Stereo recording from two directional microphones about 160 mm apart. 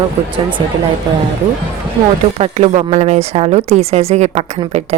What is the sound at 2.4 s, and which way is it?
A woman's voice, 40° right (ahead or behind).